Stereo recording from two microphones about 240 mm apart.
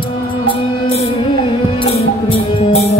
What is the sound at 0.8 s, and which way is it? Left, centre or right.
Music, left.